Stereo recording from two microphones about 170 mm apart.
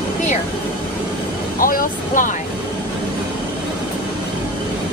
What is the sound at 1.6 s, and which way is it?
Speech, 55° left (ahead or behind).